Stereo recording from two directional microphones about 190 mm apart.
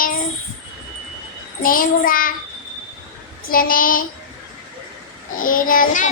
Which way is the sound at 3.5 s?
50° left (ahead or behind).